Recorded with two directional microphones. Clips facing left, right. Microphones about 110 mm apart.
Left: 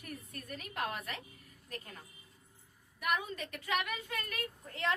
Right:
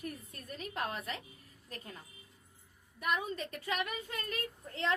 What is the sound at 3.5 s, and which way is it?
Speech, 30° right (ahead or behind).